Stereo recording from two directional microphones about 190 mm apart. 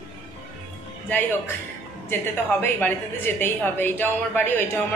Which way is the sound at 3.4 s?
10° left (ahead or behind).